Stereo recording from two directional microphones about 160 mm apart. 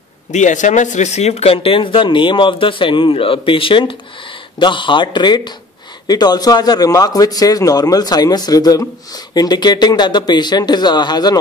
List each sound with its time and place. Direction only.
0.3 s a man's voice: 50° left (ahead or behind); by 11.3 s 25° left (ahead or behind)